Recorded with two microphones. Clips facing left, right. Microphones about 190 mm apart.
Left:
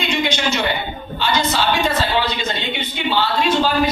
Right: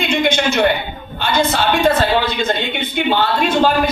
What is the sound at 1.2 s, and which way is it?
A woman's voice, 55° right (ahead or behind).